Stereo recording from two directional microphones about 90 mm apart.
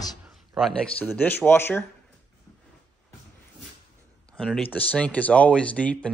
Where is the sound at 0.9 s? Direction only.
20° left (ahead or behind).